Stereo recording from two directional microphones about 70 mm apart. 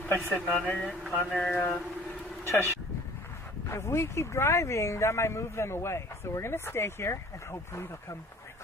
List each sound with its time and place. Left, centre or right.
0.5 s speech: centre
1.1 s a sound: centre
2.4 s speech: left